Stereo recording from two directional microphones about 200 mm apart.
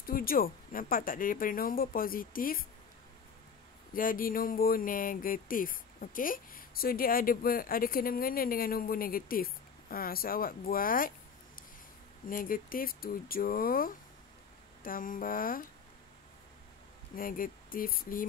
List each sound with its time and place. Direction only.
0.0 s speech: 45° left (ahead or behind)
3.9 s speech: 45° left (ahead or behind)
17.1 s speech: 45° left (ahead or behind)